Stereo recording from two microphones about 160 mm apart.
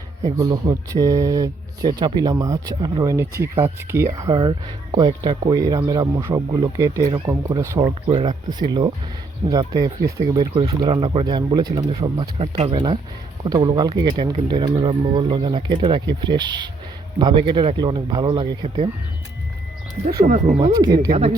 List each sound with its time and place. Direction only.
0.3 s speech: 20° right (ahead or behind)
8.0 s speech: 30° right (ahead or behind)
21.1 s speech: 45° right (ahead or behind)